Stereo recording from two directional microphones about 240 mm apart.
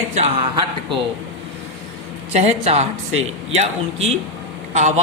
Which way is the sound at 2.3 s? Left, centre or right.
Right.